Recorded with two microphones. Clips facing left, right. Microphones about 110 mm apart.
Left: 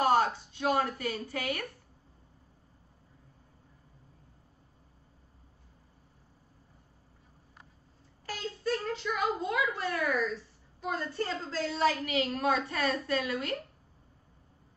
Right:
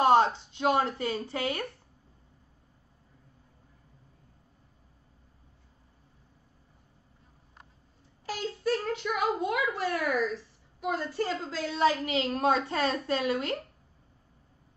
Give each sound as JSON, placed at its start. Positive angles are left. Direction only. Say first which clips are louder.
{"t": 0.0, "sound": "speech", "louder": "right 4 dB", "side_deg": -25}
{"t": 8.3, "sound": "child singing", "louder": "right 3 dB", "side_deg": -15}
{"t": 9.4, "sound": "a child's voice", "louder": "right 2 dB", "side_deg": -5}
{"t": 10.8, "sound": "child singing", "louder": "right 3 dB", "side_deg": -10}
{"t": 11.8, "sound": "a woman's voice", "louder": "right 3 dB", "side_deg": -25}